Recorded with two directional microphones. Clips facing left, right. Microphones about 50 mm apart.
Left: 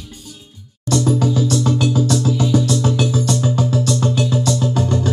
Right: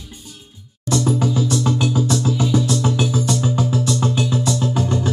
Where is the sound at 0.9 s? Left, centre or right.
Centre.